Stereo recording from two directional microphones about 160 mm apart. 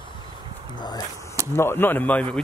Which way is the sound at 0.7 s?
25° left (ahead or behind).